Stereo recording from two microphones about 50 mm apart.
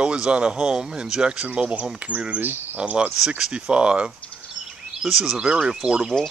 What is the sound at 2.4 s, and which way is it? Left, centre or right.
Speech, right.